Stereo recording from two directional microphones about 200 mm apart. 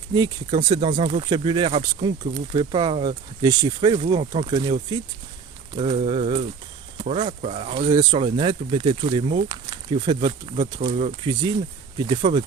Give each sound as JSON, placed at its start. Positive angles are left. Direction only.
{"t": 0.1, "sound": "speech", "side_deg": -20}